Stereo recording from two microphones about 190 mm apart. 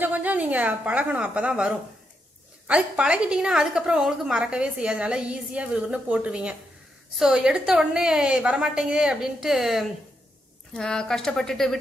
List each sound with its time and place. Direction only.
0.0 s a woman's voice: 10° right (ahead or behind)